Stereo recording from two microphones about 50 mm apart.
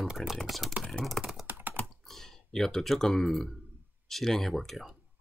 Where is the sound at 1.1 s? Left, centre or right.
Centre.